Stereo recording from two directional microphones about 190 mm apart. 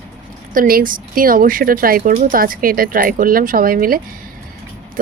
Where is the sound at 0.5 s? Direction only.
50° right (ahead or behind).